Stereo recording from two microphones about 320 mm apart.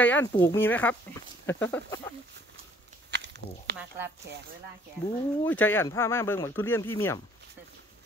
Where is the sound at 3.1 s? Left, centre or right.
Right.